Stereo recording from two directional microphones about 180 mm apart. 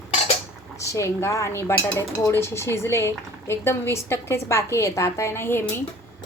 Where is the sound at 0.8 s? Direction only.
15° left (ahead or behind).